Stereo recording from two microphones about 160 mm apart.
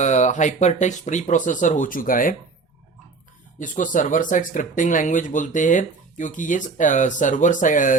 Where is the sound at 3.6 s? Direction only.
55° left (ahead or behind).